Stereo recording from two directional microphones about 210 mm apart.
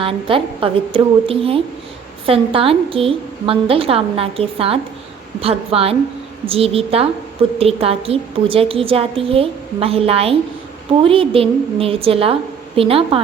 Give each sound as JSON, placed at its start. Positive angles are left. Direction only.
{"t": 0.0, "sound": "a woman's voice", "side_deg": -25}